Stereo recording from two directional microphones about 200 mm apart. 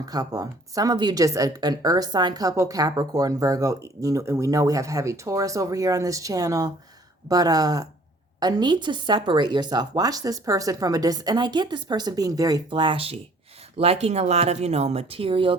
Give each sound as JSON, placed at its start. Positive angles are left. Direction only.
{"t": 0.0, "sound": "a woman's voice", "side_deg": -20}